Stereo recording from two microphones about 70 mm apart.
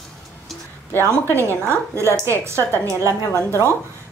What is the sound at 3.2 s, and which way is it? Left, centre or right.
Speech, left.